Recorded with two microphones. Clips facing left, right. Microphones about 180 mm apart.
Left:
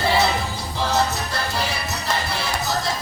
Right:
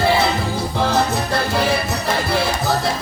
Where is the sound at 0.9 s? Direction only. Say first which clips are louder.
Right 4 dB; 55° right (ahead or behind).